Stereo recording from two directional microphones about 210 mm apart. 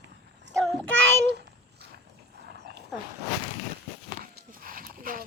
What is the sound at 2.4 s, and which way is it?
Dog, 50° right (ahead or behind).